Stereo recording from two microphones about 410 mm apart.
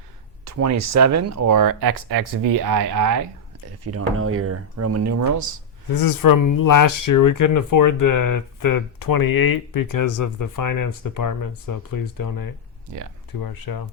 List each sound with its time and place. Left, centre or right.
0.4 s speech: right
3.8 s speech: right
5.9 s speech: left
12.9 s speech: right
13.4 s speech: left